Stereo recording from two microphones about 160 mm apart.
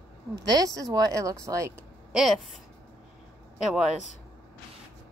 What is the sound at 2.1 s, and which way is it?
Speech, centre (ahead or behind).